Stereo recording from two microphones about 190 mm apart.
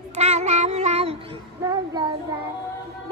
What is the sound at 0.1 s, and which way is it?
Meow, 35° right (ahead or behind).